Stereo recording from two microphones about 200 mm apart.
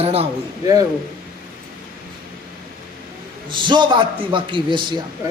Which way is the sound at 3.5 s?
25° right (ahead or behind).